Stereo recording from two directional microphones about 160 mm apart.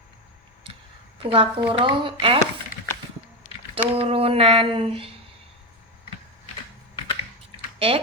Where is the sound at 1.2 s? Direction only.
35° right (ahead or behind).